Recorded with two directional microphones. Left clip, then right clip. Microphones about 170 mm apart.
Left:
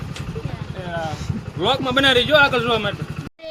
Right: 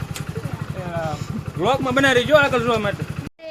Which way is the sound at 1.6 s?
5° right (ahead or behind).